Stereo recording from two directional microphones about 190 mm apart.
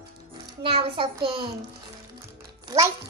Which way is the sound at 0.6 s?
30° right (ahead or behind).